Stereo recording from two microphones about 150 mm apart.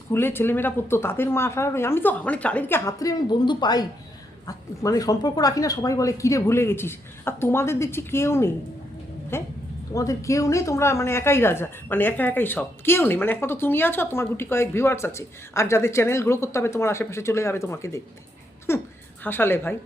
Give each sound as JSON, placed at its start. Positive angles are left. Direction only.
{"t": 0.1, "sound": "speech", "side_deg": 15}